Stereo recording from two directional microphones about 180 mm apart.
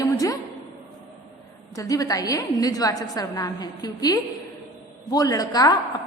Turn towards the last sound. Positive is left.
turn(degrees=20)  # may be behind; listen again after turning